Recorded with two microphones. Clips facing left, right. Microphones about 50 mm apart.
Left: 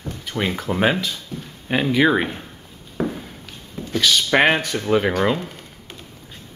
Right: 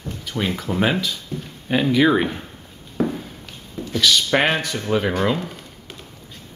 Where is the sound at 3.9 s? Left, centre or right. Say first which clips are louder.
Left 1 dB; centre.